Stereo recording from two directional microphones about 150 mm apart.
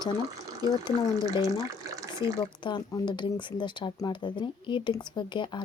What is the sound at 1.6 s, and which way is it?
Water, 20° right (ahead or behind).